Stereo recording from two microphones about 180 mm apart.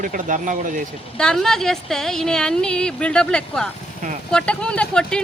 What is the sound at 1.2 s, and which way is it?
Speech, 5° left (ahead or behind).